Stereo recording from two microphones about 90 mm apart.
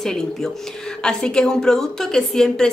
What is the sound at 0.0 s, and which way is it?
A woman's voice, 5° left (ahead or behind).